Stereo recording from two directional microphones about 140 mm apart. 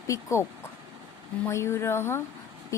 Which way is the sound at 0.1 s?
20° left (ahead or behind).